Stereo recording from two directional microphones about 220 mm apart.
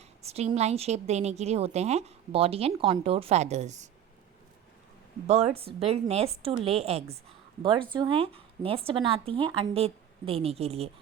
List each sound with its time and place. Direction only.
0.3 s a woman's voice: 30° right (ahead or behind)
5.3 s a woman's voice: 25° right (ahead or behind)